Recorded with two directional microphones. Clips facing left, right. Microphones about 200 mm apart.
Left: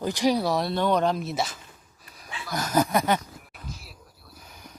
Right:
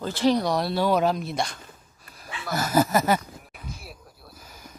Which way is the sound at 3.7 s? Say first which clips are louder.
Right 3 dB; 55° right (ahead or behind).